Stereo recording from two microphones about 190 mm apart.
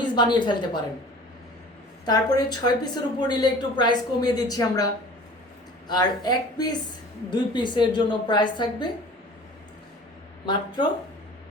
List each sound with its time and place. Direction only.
0.0 s a woman's voice: 25° left (ahead or behind)
2.0 s a woman's voice: 20° left (ahead or behind)
5.9 s a woman's voice: 20° left (ahead or behind)
10.4 s a woman's voice: 25° left (ahead or behind)